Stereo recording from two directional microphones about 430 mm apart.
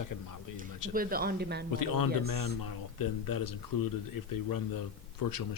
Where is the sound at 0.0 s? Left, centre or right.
Left.